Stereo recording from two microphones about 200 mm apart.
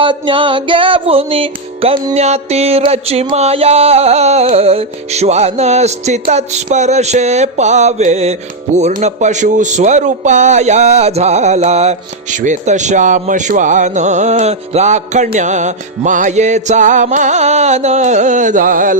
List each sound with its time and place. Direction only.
0.0 s music: 25° right (ahead or behind); by 18.9 s 40° right (ahead or behind)